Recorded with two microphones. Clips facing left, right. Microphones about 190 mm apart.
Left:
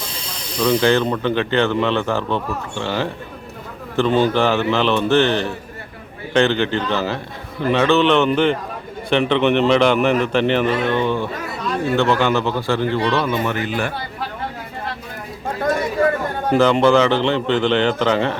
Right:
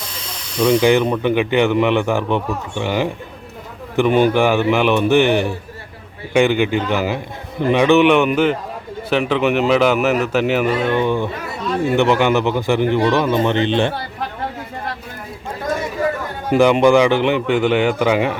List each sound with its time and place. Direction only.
0.6 s a man's voice: 15° right (ahead or behind)
16.5 s speech: 15° right (ahead or behind)